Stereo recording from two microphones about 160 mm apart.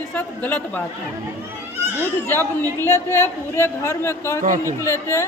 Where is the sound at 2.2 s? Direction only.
15° left (ahead or behind).